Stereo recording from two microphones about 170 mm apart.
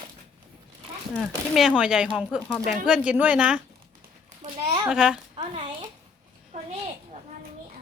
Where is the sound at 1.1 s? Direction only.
Centre (ahead or behind).